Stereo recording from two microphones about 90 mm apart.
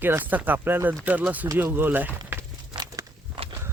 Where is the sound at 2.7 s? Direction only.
10° right (ahead or behind).